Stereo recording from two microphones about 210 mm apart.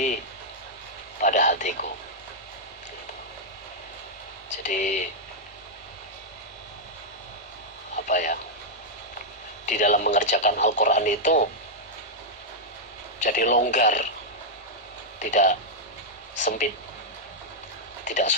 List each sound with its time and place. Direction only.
1.2 s a sound: 35° left (ahead or behind)
4.6 s speech: 35° left (ahead or behind)
8.0 s speech: 35° left (ahead or behind)
9.6 s speech: 35° left (ahead or behind)
13.1 s speech: 35° left (ahead or behind)
15.2 s speech: 35° left (ahead or behind)
18.0 s speech: 35° left (ahead or behind)